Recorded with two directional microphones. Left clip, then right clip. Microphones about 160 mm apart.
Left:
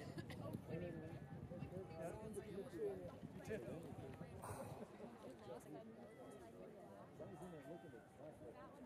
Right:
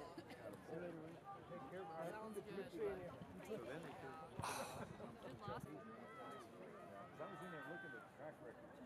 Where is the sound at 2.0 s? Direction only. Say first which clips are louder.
Even; 15° right (ahead or behind).